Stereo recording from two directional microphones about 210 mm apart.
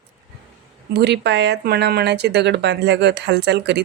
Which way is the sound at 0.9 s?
50° right (ahead or behind).